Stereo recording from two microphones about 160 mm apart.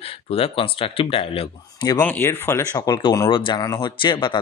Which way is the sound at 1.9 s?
10° left (ahead or behind).